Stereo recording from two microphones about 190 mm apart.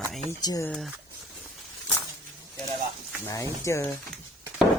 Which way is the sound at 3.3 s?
15° left (ahead or behind).